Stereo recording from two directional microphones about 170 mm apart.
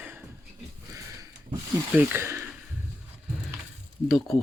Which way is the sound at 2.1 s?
15° right (ahead or behind).